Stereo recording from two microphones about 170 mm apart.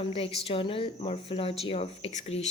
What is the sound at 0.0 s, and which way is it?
Speech, 35° left (ahead or behind).